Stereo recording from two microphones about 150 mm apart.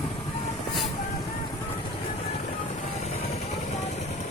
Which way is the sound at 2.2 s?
45° left (ahead or behind).